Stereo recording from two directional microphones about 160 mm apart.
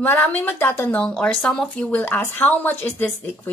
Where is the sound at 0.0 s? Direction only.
10° left (ahead or behind).